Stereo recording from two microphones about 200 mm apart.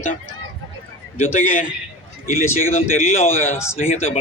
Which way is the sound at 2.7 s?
30° left (ahead or behind).